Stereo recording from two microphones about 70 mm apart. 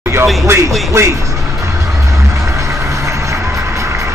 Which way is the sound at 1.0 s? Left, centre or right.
Right.